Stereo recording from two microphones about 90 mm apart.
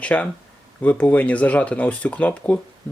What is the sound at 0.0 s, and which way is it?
Speech, 15° left (ahead or behind).